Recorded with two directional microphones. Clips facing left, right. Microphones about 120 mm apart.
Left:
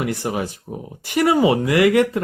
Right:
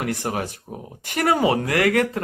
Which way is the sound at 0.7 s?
10° right (ahead or behind).